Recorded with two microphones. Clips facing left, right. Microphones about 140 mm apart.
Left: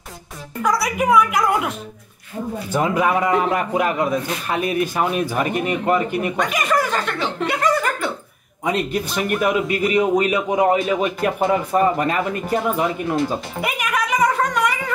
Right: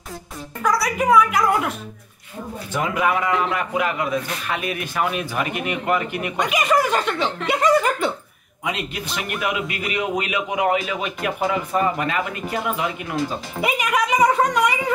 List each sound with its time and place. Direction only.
0.6 s speech: 20° left (ahead or behind)
2.7 s a man's voice: 30° left (ahead or behind)
6.3 s chuckle: centre (ahead or behind)
8.6 s a man's voice: 40° left (ahead or behind)
13.1 s music: centre (ahead or behind)